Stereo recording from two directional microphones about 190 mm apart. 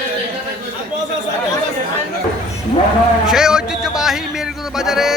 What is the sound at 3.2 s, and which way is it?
A man's voice, centre (ahead or behind).